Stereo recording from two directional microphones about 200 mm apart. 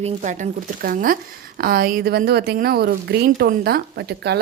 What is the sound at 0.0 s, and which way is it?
Speech, 35° right (ahead or behind).